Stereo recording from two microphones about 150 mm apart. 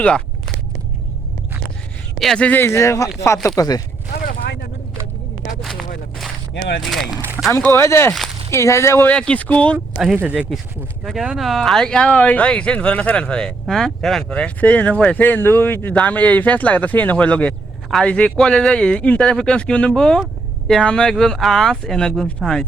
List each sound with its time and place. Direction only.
2.1 s speech: 5° left (ahead or behind); by 3.8 s 25° left (ahead or behind)
6.8 s speech: centre (ahead or behind)
7.5 s speech: 20° left (ahead or behind); by 22.6 s centre (ahead or behind)